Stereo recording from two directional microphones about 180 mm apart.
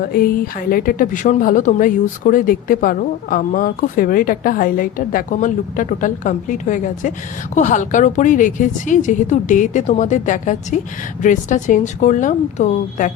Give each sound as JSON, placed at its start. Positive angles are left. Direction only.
{"t": 0.0, "sound": "a woman's voice", "side_deg": 55}